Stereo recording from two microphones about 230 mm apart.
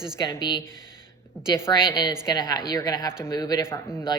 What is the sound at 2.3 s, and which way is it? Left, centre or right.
Speech, centre.